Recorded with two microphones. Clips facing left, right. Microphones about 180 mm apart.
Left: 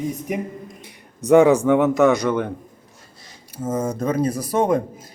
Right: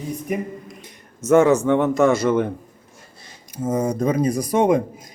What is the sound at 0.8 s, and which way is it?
Speech, 15° left (ahead or behind).